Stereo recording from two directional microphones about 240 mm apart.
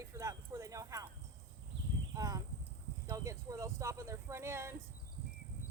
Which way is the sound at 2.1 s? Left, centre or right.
Centre.